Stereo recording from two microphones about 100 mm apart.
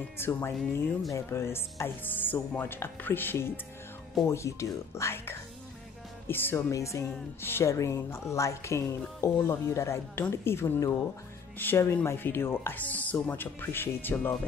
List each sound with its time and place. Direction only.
0.2 s speech: 25° left (ahead or behind)